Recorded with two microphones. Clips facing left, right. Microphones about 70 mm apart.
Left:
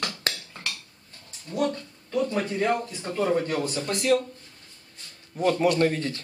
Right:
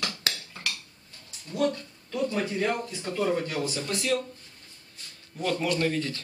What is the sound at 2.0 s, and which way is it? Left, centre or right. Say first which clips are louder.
Speech: left 2 dB; left.